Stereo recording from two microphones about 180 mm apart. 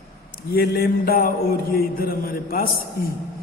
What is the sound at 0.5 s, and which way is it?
A man's voice, 60° left (ahead or behind).